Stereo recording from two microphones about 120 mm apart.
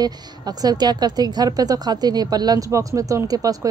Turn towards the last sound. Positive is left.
turn(degrees=-30)  # may be behind; listen again after turning